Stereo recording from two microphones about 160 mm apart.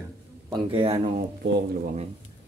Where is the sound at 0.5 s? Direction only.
35° right (ahead or behind).